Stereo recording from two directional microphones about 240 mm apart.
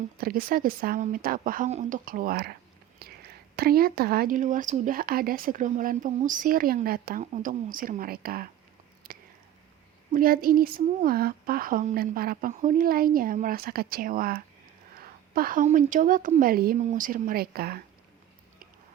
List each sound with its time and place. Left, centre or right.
0.2 s speech: right
9.0 s a sound: right
10.1 s speech: right